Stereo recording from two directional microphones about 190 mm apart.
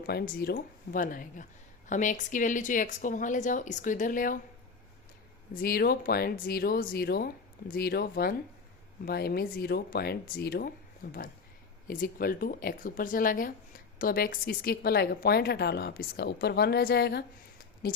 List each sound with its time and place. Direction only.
0.0 s speech: 55° left (ahead or behind)
5.5 s speech: 50° left (ahead or behind)